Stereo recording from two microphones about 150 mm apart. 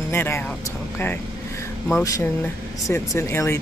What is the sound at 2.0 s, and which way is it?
Speech, 20° left (ahead or behind).